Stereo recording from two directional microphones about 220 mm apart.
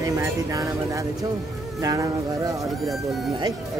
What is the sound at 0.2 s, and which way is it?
Speech, 15° right (ahead or behind).